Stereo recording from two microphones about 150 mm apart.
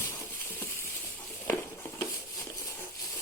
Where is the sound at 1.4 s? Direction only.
15° left (ahead or behind).